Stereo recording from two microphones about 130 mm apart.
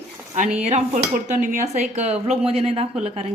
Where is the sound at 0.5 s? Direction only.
60° right (ahead or behind).